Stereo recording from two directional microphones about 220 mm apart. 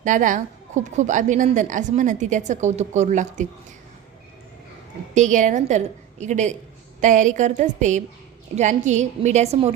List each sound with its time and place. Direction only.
0.0 s a woman's voice: 35° right (ahead or behind)
5.1 s a woman's voice: 35° right (ahead or behind)